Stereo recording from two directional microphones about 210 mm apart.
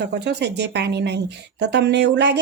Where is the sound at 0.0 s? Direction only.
55° right (ahead or behind).